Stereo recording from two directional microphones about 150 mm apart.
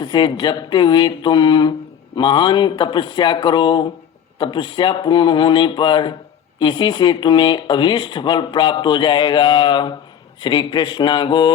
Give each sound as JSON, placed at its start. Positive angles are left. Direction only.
{"t": 0.0, "sound": "speech", "side_deg": 30}